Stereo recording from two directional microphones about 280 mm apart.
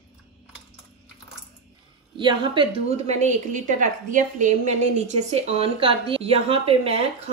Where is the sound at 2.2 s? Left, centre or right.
Centre.